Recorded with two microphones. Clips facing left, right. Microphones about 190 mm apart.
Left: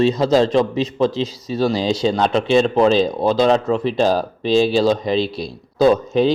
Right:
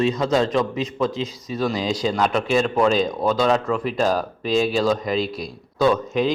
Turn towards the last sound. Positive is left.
turn(degrees=30)  # may be behind; listen again after turning